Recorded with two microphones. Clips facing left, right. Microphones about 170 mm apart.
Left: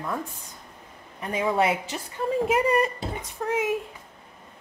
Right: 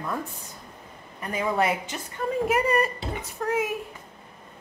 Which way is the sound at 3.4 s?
5° left (ahead or behind).